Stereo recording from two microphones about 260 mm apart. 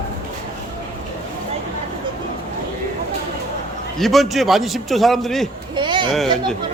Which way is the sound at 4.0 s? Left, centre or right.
Centre.